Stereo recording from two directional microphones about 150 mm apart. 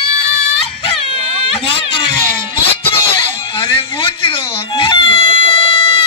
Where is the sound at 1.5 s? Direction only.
35° left (ahead or behind).